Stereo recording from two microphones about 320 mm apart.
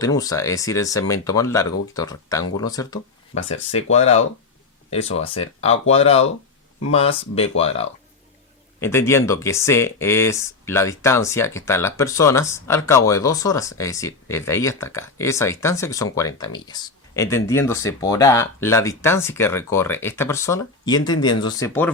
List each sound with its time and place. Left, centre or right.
0.0 s speech: centre
8.8 s speech: centre